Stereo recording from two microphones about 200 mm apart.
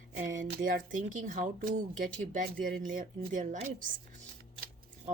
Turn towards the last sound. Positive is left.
turn(degrees=-40)  # may be behind; listen again after turning